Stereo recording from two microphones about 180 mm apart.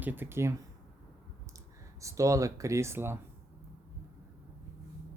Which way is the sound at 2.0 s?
15° right (ahead or behind).